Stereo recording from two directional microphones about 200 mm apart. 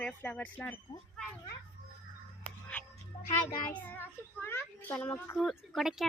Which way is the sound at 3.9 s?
10° left (ahead or behind).